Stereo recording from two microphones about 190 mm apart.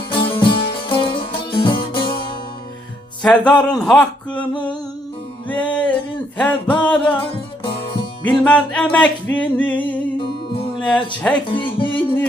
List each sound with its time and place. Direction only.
0.1 s music: 25° left (ahead or behind)
3.5 s speech: 5° left (ahead or behind)
4.4 s music: 5° left (ahead or behind)
8.2 s music: 5° left (ahead or behind)
10.2 s music: 25° left (ahead or behind)
10.8 s music: 5° left (ahead or behind)
11.4 s speech: 25° left (ahead or behind)